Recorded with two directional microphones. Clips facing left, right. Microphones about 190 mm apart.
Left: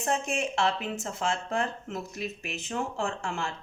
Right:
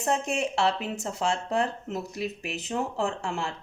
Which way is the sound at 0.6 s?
35° right (ahead or behind).